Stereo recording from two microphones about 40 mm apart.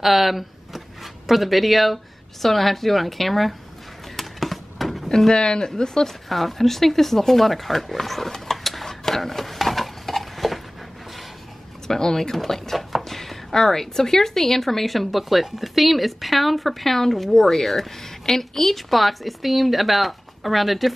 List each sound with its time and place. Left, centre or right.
0.0 s speech: centre
4.2 s a sound: centre
5.3 s speech: centre
6.2 s speech: centre
11.9 s speech: centre